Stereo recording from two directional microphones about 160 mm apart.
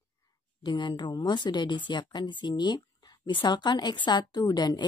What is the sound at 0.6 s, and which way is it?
A woman's voice, 30° left (ahead or behind).